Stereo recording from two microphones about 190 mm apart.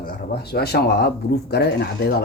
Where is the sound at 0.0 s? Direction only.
55° left (ahead or behind).